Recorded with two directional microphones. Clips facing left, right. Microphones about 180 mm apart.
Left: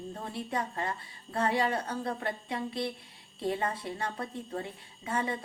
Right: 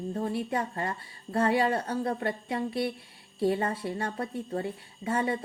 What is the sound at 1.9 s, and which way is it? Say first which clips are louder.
A woman's voice: right 4 dB; 30° right (ahead or behind).